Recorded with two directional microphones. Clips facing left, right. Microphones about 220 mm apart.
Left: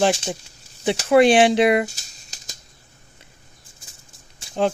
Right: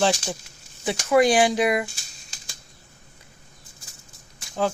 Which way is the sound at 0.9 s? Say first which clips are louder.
Left 4 dB; 30° left (ahead or behind).